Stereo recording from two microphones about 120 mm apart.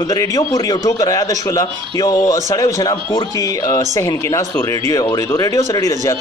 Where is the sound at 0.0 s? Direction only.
30° left (ahead or behind).